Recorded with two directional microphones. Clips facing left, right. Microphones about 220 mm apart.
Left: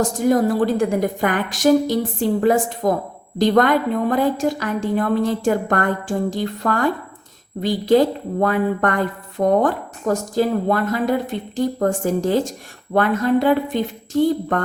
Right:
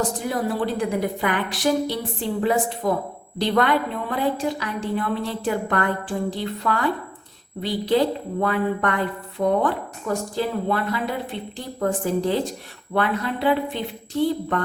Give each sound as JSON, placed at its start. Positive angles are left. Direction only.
{"t": 0.0, "sound": "a woman's voice", "side_deg": 45}